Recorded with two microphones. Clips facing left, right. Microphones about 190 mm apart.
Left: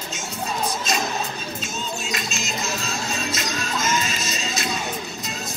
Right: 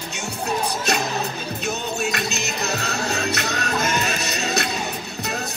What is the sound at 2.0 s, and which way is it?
Music, 65° right (ahead or behind).